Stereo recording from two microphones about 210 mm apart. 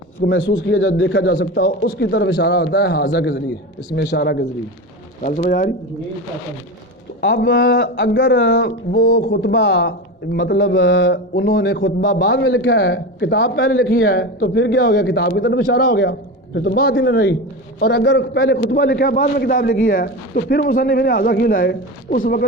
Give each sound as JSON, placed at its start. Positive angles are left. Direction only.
{"t": 0.3, "sound": "a man's voice", "side_deg": 60}
{"t": 5.2, "sound": "speech", "side_deg": 40}
{"t": 7.2, "sound": "a man's voice", "side_deg": 55}
{"t": 11.8, "sound": "speech", "side_deg": 40}
{"t": 12.2, "sound": "a man's voice", "side_deg": 60}
{"t": 13.9, "sound": "a man's voice", "side_deg": 50}